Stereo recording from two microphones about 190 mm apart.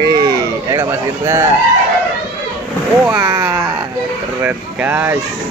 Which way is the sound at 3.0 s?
10° right (ahead or behind).